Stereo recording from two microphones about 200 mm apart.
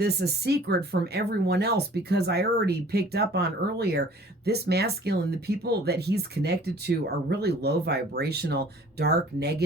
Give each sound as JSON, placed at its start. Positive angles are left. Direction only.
{"t": 0.0, "sound": "speech", "side_deg": -55}